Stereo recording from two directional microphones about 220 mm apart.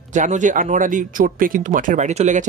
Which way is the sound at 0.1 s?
35° right (ahead or behind).